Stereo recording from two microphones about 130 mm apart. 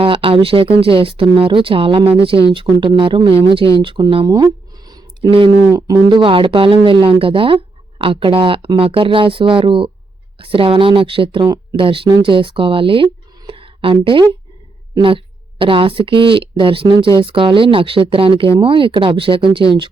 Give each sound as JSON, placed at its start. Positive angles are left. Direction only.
{"t": 0.0, "sound": "speech", "side_deg": -45}
{"t": 4.3, "sound": "a sound", "side_deg": -30}
{"t": 6.1, "sound": "speech", "side_deg": -40}
{"t": 11.4, "sound": "speech", "side_deg": -30}
{"t": 11.8, "sound": "speech", "side_deg": -45}
{"t": 13.5, "sound": "a sound", "side_deg": -45}
{"t": 15.0, "sound": "a woman's voice", "side_deg": -40}